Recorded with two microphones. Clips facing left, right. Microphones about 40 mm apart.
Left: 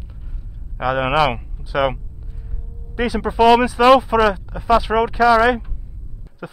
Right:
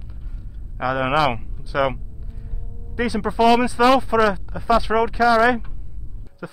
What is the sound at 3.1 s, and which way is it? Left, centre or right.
Speech, centre.